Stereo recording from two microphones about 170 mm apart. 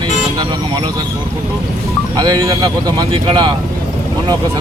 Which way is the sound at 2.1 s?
20° right (ahead or behind).